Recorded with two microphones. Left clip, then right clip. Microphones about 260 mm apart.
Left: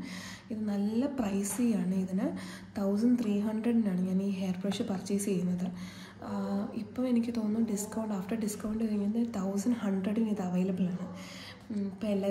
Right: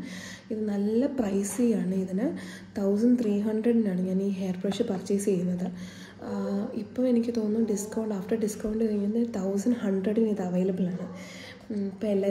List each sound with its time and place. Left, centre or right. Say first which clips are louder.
0.7 s a woman's voice: right 6 dB; centre
9.4 s a woman's voice: right 6 dB; left
9.7 s a woman's voice: right 6 dB; centre
12.0 s a woman's voice: right 6 dB; centre